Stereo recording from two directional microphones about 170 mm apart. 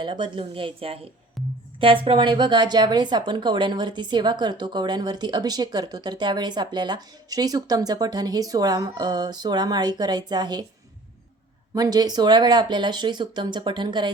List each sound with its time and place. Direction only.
0.0 s a woman's voice: 25° right (ahead or behind)
1.4 s music: centre (ahead or behind)
1.8 s a woman's voice: 30° right (ahead or behind)
11.7 s a woman's voice: 20° right (ahead or behind)